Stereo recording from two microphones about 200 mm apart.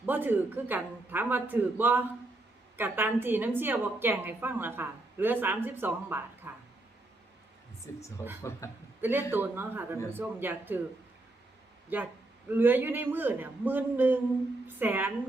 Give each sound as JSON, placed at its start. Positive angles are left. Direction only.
{"t": 0.0, "sound": "a woman's voice", "side_deg": -10}
{"t": 7.9, "sound": "speech", "side_deg": 15}
{"t": 9.0, "sound": "a man's voice", "side_deg": -10}
{"t": 11.9, "sound": "a woman's voice", "side_deg": -10}